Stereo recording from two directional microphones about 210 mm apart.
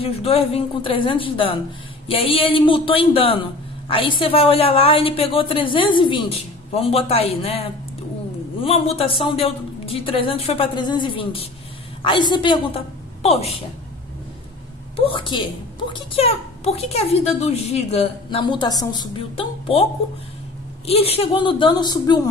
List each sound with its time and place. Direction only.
0.0 s a woman's voice: 30° left (ahead or behind)
15.0 s a woman's voice: 25° left (ahead or behind)